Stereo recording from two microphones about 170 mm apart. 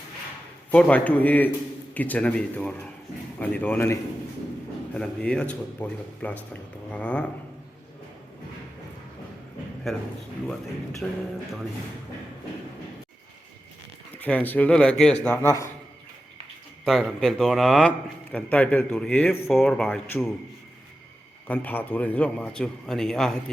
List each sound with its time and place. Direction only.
0.7 s a man's voice: 10° left (ahead or behind)
4.9 s a man's voice: 5° left (ahead or behind)
9.9 s a man's voice: centre (ahead or behind)
11.0 s a man's voice: 5° left (ahead or behind)
14.2 s a man's voice: 10° left (ahead or behind)
15.4 s a man's voice: 20° left (ahead or behind)
16.8 s a man's voice: centre (ahead or behind)
21.4 s a man's voice: 10° left (ahead or behind)